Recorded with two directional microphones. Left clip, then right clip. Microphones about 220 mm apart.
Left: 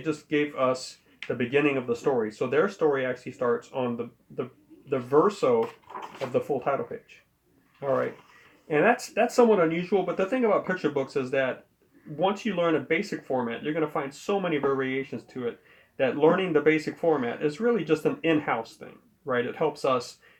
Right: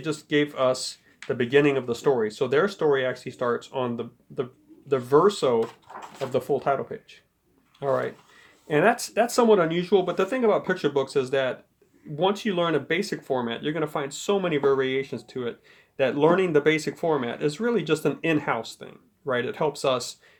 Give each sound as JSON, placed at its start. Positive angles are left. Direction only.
{"t": 0.0, "sound": "speech", "side_deg": -45}
{"t": 7.8, "sound": "speech", "side_deg": -45}